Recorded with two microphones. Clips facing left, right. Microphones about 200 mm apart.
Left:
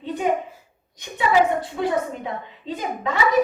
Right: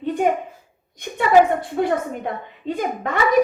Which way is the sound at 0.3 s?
55° right (ahead or behind).